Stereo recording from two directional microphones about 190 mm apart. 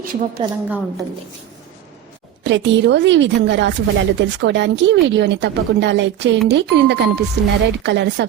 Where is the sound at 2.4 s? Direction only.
70° right (ahead or behind).